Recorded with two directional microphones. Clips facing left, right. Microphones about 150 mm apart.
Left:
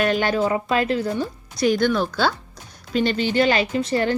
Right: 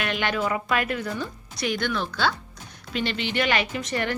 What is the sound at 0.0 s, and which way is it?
A woman's voice, 35° left (ahead or behind).